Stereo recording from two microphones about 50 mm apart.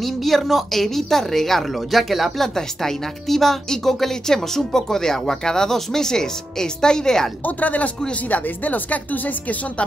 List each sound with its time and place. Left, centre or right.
0.0 s a woman's voice: centre
7.4 s speech: left